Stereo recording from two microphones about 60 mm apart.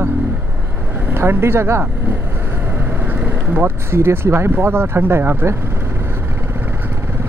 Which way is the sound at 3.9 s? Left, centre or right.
Right.